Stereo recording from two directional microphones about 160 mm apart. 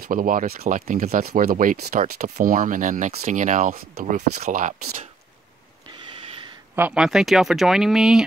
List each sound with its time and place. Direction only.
0.0 s speech: 60° right (ahead or behind)
6.7 s speech: 10° right (ahead or behind)